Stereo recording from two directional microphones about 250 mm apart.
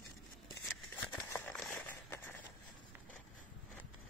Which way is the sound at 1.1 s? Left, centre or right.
Centre.